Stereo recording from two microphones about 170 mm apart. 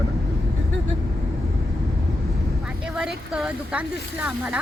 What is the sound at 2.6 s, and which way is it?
Speech, 5° right (ahead or behind).